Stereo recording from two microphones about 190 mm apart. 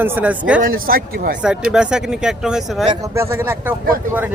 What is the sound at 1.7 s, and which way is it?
Speech, 5° right (ahead or behind).